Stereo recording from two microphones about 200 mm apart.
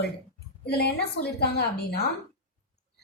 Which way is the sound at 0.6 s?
55° left (ahead or behind).